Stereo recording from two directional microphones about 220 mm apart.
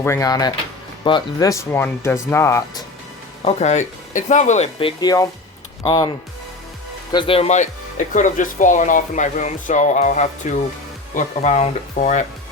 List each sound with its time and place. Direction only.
0.0 s speech: 15° left (ahead or behind)
3.4 s speech: 30° left (ahead or behind)
7.1 s speech: 25° left (ahead or behind)